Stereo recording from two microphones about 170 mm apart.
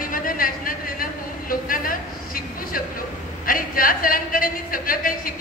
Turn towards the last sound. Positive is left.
turn(degrees=55)  # may be behind; listen again after turning